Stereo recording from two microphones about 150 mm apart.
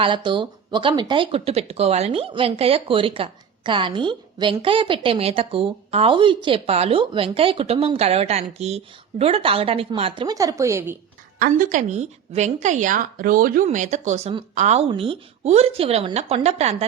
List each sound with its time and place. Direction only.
0.0 s speech: 35° right (ahead or behind)
10.3 s speech: 20° right (ahead or behind)
11.3 s a woman's voice: 65° right (ahead or behind)
13.7 s speech: 55° right (ahead or behind)